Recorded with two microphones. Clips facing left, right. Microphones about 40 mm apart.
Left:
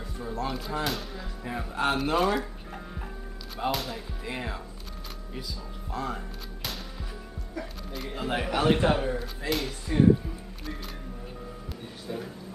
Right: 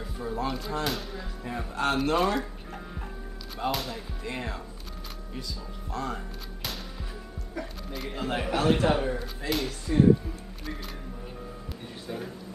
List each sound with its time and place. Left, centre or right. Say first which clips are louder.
0.2 s speech: right 1 dB; centre
5.9 s speech: even; centre
8.5 s a man's voice: even; centre
8.9 s speech: even; centre
9.8 s music: even; centre